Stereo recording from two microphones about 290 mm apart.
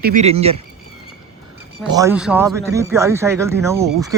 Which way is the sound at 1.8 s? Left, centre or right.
Centre.